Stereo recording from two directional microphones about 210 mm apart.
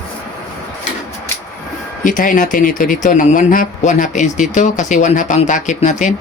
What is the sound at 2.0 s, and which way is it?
A man's voice, 40° left (ahead or behind).